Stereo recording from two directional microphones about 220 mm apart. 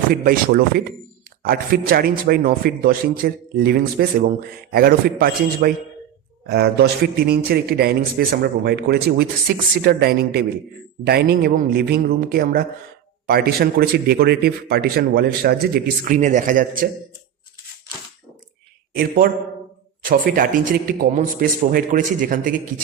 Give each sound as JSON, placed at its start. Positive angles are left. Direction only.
{"t": 0.1, "sound": "a man's voice", "side_deg": -40}
{"t": 18.9, "sound": "speech", "side_deg": -40}